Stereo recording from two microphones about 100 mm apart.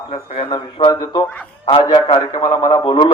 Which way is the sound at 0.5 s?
50° left (ahead or behind).